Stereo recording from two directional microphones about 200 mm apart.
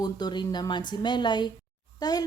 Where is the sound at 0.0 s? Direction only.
20° left (ahead or behind).